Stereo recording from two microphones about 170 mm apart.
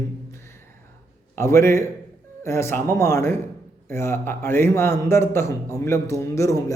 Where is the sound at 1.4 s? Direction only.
15° left (ahead or behind).